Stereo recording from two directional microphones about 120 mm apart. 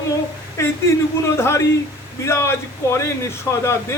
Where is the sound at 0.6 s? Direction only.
20° left (ahead or behind).